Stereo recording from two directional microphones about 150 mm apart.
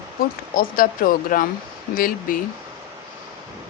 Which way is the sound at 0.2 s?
75° left (ahead or behind).